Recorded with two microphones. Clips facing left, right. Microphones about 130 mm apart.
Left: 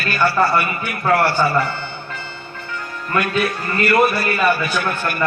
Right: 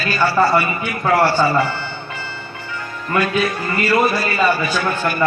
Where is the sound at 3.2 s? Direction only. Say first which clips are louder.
Right 1 dB; 65° left (ahead or behind).